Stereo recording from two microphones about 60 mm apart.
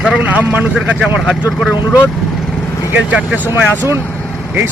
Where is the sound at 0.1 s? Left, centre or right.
Right.